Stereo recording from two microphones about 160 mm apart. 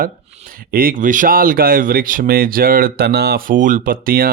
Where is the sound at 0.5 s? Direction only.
65° right (ahead or behind).